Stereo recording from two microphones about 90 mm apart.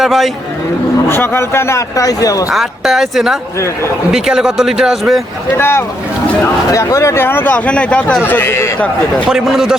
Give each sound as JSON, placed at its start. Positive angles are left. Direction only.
{"t": 0.0, "sound": "speech", "side_deg": 0}
{"t": 1.0, "sound": "speech", "side_deg": 25}
{"t": 2.5, "sound": "speech", "side_deg": 0}
{"t": 5.5, "sound": "speech", "side_deg": 30}
{"t": 8.2, "sound": "speech", "side_deg": 25}
{"t": 9.3, "sound": "a man's voice", "side_deg": -5}